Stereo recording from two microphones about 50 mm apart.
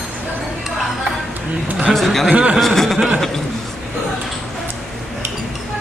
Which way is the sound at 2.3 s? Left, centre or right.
Right.